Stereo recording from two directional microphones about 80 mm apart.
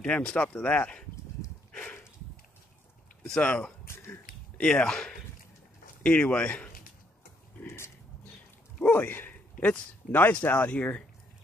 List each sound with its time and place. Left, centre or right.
0.0 s speech: centre
1.7 s a sound: centre
3.3 s speech: centre
3.8 s a sound: left
4.6 s speech: centre
7.6 s speech: left
8.9 s a man's voice: left